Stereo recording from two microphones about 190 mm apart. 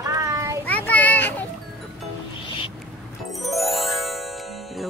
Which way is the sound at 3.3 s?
Centre (ahead or behind).